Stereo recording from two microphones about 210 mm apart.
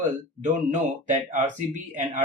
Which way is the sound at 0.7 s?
35° right (ahead or behind).